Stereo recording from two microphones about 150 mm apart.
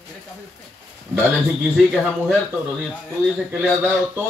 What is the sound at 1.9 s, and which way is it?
Speech, centre (ahead or behind).